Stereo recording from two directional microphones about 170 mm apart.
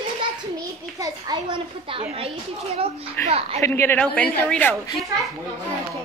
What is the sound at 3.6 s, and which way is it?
A woman's voice, 15° left (ahead or behind).